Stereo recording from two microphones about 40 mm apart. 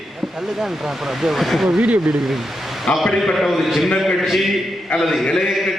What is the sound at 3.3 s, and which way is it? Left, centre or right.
A man's voice, centre.